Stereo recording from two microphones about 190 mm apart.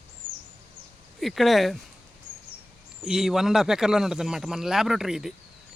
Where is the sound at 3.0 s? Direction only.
Centre (ahead or behind).